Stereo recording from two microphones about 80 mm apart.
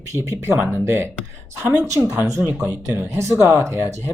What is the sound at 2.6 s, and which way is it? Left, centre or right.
Speech, right.